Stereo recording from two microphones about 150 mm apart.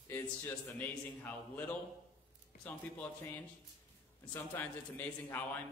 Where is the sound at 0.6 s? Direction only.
10° left (ahead or behind).